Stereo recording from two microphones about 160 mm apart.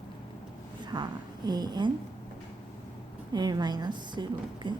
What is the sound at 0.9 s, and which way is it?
Speech, 25° right (ahead or behind).